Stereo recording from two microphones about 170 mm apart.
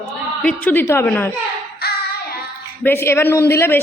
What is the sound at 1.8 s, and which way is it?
Music, 70° left (ahead or behind).